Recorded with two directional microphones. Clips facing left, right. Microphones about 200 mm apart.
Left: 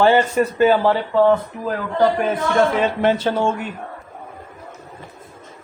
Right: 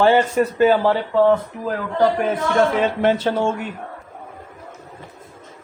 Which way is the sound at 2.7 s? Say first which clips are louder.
Even; 50° right (ahead or behind).